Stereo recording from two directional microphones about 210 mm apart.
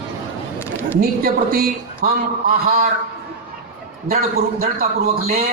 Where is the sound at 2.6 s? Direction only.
30° right (ahead or behind).